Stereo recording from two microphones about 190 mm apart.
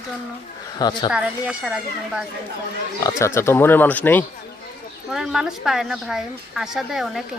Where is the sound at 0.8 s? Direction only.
20° left (ahead or behind).